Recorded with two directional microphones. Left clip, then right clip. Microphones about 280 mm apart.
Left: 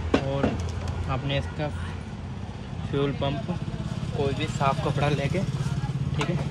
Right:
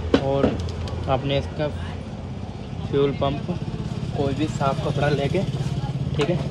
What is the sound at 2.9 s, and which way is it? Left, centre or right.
Speech, centre.